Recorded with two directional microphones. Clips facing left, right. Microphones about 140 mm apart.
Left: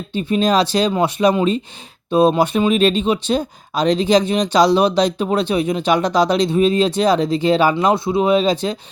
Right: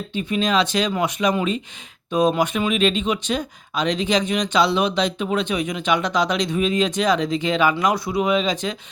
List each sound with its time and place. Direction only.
0.1 s speech: 35° left (ahead or behind)